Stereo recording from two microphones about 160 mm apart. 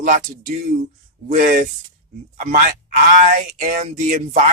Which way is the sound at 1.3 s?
50° right (ahead or behind).